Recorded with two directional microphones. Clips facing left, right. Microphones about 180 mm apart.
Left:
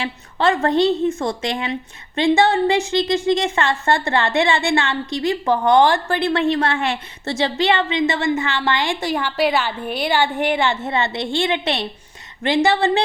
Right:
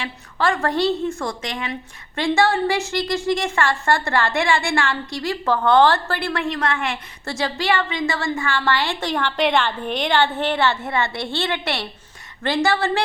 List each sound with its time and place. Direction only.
0.0 s a woman's voice: 25° left (ahead or behind)